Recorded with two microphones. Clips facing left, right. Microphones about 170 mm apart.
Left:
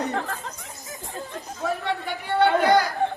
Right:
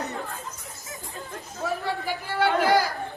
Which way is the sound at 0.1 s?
80° left.